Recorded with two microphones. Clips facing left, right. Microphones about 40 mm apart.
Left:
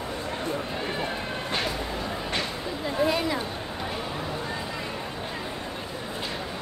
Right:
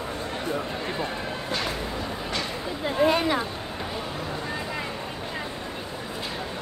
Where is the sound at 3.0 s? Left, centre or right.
Right.